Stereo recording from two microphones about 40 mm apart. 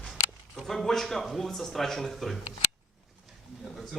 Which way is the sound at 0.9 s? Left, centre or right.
Centre.